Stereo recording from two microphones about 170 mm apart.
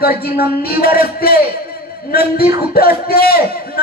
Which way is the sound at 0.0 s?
60° left (ahead or behind).